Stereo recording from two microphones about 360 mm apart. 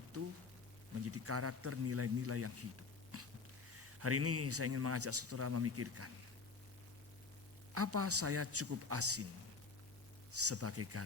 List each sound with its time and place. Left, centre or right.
0.1 s a sound: right
1.0 s speech: right
3.1 s a sound: right
4.0 s speech: right
7.7 s speech: right
10.3 s speech: right